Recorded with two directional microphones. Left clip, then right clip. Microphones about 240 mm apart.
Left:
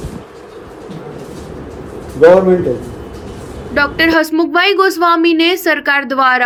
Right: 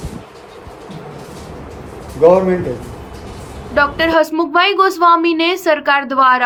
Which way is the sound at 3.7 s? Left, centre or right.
Centre.